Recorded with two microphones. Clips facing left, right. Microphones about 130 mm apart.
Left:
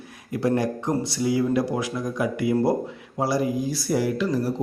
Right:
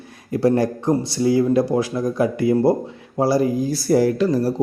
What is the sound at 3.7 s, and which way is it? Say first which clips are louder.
Speech: right 7 dB; 40° right (ahead or behind).